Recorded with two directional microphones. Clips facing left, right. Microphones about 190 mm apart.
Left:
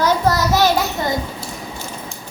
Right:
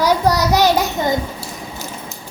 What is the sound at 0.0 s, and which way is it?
Child singing, 15° right (ahead or behind).